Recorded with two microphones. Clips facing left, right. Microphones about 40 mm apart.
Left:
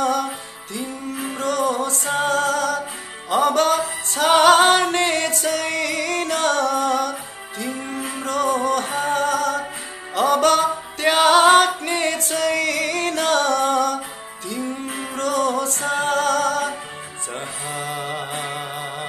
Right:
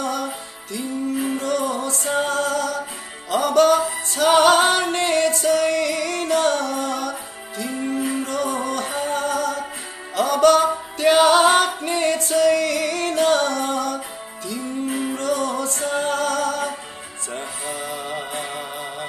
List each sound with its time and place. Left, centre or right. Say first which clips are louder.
0.0 s jingle bell: left 4 dB; left
1.4 s music: left 2 dB; left
3.3 s music: right 1 dB; left
10.1 s music: right 1 dB; left
15.1 s music: left 6 dB; left
17.9 s music: left 1 dB; left